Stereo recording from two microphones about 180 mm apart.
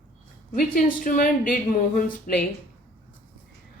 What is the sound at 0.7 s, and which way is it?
A woman's voice, 50° left (ahead or behind).